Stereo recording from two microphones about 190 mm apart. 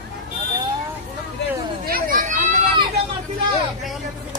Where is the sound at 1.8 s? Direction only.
50° right (ahead or behind).